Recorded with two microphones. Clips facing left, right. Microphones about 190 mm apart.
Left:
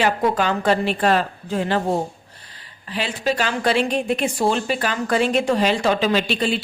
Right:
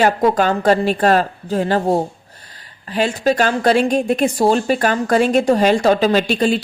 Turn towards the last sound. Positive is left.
turn(degrees=-45)  # may be behind; listen again after turning